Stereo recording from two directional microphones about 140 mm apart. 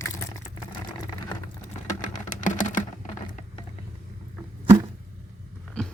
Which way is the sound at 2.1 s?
65° left (ahead or behind).